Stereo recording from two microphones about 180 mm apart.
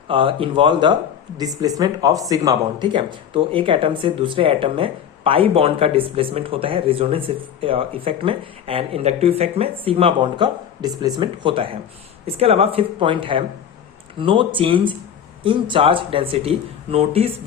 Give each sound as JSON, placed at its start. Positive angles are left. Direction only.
{"t": 0.1, "sound": "speech", "side_deg": -30}